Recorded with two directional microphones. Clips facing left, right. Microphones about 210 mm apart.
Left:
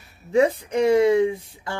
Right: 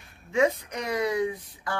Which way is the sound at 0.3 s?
30° left (ahead or behind).